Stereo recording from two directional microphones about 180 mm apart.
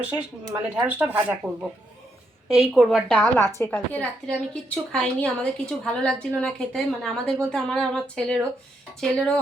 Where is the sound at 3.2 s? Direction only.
15° left (ahead or behind).